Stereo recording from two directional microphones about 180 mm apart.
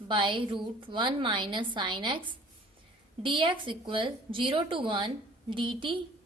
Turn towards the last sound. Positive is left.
turn(degrees=-25)  # may be behind; listen again after turning